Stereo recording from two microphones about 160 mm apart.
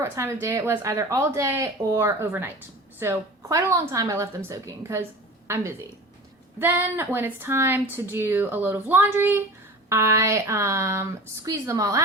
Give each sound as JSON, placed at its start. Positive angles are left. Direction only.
{"t": 0.0, "sound": "a woman's voice", "side_deg": -15}